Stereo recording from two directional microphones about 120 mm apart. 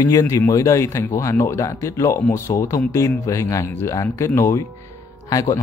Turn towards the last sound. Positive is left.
turn(degrees=30)  # may be behind; listen again after turning